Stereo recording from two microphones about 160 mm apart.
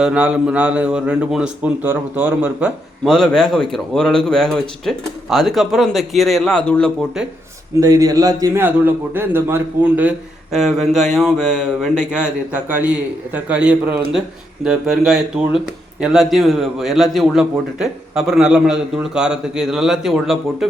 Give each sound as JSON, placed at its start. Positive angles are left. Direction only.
{"t": 0.0, "sound": "a man's voice", "side_deg": -5}
{"t": 3.1, "sound": "speech", "side_deg": 5}
{"t": 7.8, "sound": "a man's voice", "side_deg": -20}